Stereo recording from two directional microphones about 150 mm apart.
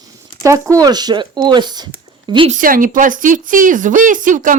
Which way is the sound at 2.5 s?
65° right (ahead or behind).